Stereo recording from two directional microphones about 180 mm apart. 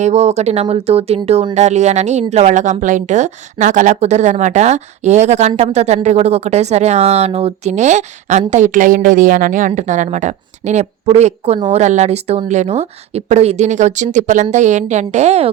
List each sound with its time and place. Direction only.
0.0 s a woman's voice: 40° right (ahead or behind)